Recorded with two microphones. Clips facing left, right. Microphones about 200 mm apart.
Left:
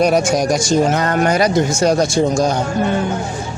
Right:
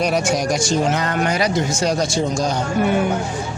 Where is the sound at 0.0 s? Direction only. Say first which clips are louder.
Left 5 dB; 45° left (ahead or behind).